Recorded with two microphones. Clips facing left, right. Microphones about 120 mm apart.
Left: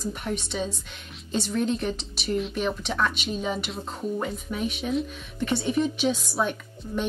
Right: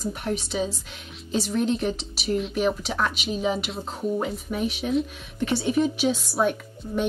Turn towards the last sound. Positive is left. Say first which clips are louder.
# right 2 dB
turn(degrees=-5)  # may be behind; listen again after turning